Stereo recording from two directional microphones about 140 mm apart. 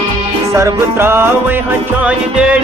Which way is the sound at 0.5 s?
20° right (ahead or behind).